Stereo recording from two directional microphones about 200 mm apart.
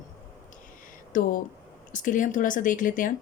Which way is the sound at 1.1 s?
40° left (ahead or behind).